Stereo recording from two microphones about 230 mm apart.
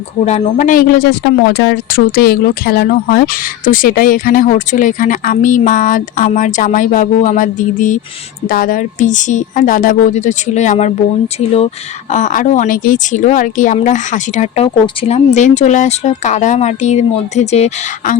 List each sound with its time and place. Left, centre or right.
0.3 s speech: left